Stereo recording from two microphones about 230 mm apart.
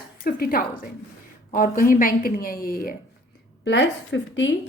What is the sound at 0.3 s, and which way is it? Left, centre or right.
A woman's voice, left.